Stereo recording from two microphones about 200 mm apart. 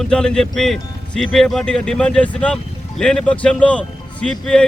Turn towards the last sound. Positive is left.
turn(degrees=5)  # may be behind; listen again after turning